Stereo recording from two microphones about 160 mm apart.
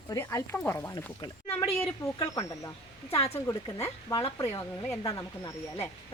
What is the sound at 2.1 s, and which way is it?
Speech, 20° left (ahead or behind).